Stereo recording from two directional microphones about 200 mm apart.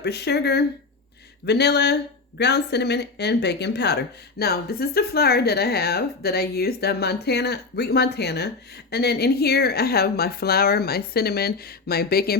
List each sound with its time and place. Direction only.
0.0 s speech: 55° left (ahead or behind)